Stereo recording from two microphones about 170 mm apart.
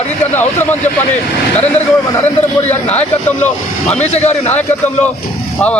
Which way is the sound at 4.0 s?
40° left (ahead or behind).